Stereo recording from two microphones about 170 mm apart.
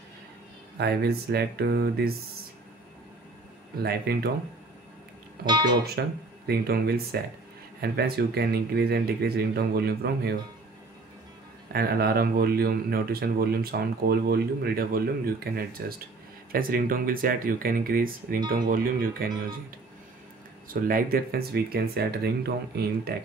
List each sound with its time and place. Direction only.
0.7 s speech: 70° right (ahead or behind)
3.8 s speech: 70° right (ahead or behind)
5.4 s speech: 25° right (ahead or behind)
5.9 s speech: 70° right (ahead or behind)
11.7 s speech: 65° right (ahead or behind)
20.6 s speech: 55° right (ahead or behind)